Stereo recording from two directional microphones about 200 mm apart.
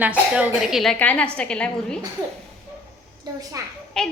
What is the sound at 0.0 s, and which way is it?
A woman's voice, 5° right (ahead or behind).